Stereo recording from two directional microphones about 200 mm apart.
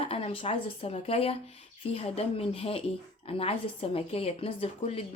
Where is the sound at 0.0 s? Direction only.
25° left (ahead or behind).